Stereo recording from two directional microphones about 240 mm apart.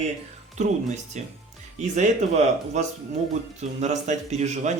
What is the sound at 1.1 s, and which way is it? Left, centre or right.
Speech, right.